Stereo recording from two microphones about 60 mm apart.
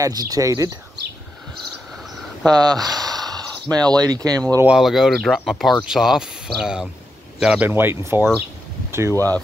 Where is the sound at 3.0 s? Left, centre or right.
Right.